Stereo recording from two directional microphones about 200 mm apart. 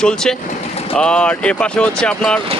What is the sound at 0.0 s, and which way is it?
Speech, 5° left (ahead or behind).